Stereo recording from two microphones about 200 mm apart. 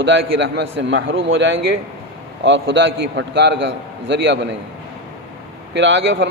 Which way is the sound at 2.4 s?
65° right (ahead or behind).